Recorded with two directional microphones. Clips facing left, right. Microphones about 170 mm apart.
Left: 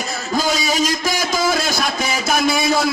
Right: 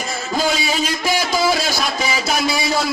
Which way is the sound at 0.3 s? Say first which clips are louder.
Left 1 dB; 40° left (ahead or behind).